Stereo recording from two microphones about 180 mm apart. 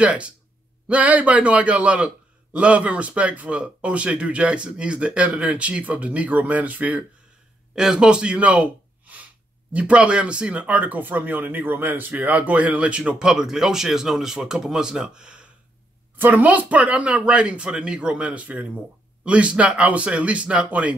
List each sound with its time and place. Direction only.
0.0 s a man's voice: 5° right (ahead or behind)